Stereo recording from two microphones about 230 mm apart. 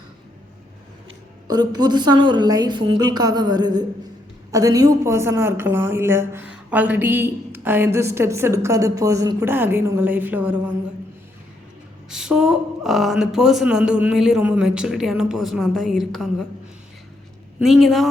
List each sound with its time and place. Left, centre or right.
1.5 s a woman's voice: centre
12.0 s speech: centre
17.6 s speech: centre